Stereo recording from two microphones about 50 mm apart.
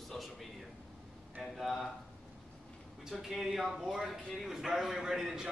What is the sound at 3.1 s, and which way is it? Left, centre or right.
A man's voice, centre.